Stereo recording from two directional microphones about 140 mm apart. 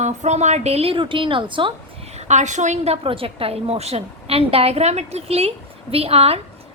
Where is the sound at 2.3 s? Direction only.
55° right (ahead or behind).